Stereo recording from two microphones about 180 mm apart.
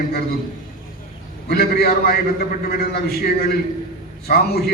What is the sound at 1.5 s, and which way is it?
A man's voice, 60° left (ahead or behind).